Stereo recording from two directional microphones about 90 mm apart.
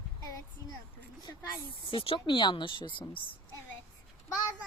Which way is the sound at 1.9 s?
80° left.